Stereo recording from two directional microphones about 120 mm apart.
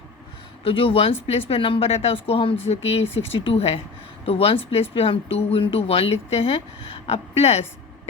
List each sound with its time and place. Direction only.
0.6 s speech: 50° left (ahead or behind)